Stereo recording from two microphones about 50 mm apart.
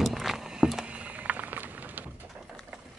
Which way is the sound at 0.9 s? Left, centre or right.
Right.